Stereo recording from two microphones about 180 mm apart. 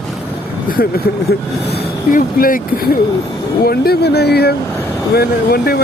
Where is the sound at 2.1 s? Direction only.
50° left (ahead or behind).